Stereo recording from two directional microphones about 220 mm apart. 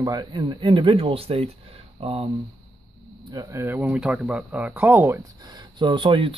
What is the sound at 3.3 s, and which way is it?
Speech, 15° right (ahead or behind).